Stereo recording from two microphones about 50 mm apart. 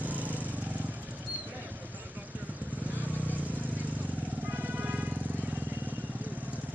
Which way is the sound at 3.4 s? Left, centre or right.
Right.